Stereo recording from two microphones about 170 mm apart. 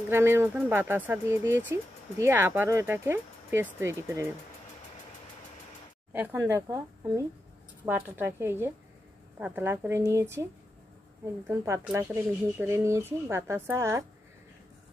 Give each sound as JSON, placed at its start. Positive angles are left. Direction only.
{"t": 0.1, "sound": "speech", "side_deg": -15}
{"t": 6.1, "sound": "speech", "side_deg": -10}
{"t": 11.4, "sound": "speech", "side_deg": -15}